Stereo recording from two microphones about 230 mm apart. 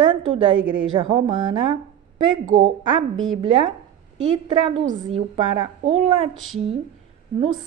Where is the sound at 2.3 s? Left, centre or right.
Right.